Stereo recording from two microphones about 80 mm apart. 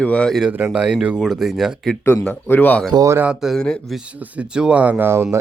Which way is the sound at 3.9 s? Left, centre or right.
Centre.